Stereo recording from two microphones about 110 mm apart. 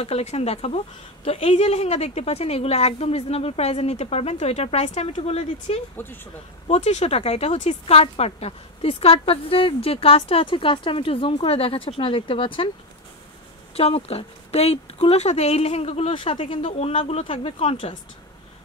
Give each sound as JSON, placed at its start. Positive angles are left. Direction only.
{"t": 0.0, "sound": "a woman's voice", "side_deg": 80}
{"t": 6.0, "sound": "speech", "side_deg": 20}
{"t": 6.7, "sound": "speech", "side_deg": 90}
{"t": 13.7, "sound": "speech", "side_deg": 65}